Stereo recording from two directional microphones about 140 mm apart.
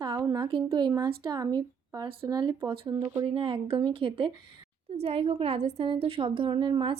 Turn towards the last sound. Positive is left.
turn(degrees=-35)  # may be behind; listen again after turning